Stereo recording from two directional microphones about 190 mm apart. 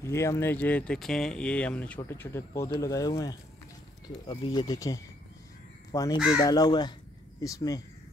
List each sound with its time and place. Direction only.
0.0 s speech: 15° left (ahead or behind)